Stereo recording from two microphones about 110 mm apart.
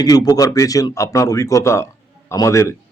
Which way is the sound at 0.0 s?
35° left (ahead or behind).